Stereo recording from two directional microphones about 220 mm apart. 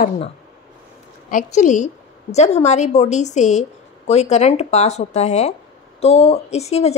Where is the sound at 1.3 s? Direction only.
35° left (ahead or behind).